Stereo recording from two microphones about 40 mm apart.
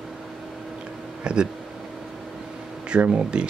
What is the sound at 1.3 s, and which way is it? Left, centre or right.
Speech, right.